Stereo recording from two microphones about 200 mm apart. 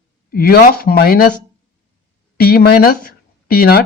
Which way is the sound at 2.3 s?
50° left (ahead or behind).